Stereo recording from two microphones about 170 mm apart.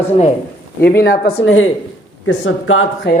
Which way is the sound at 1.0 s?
70° left (ahead or behind).